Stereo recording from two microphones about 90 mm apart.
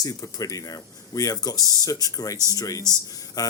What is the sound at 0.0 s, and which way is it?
Speech, 45° left (ahead or behind).